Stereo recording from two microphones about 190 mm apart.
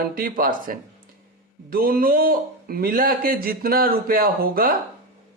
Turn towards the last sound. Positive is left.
turn(degrees=-50)  # may be behind; listen again after turning